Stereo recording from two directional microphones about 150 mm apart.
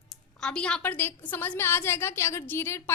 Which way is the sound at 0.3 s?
5° left (ahead or behind).